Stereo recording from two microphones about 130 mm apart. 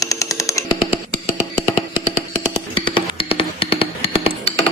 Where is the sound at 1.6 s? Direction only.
40° left (ahead or behind).